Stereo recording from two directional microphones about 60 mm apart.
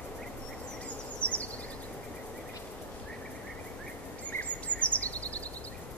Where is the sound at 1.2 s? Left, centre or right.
Left.